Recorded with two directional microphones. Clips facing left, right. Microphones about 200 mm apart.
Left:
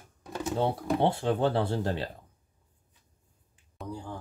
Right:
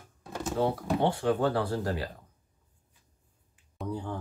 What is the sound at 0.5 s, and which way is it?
Speech, 25° left (ahead or behind).